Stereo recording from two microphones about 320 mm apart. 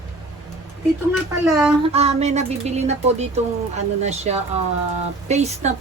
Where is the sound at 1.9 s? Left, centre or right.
Centre.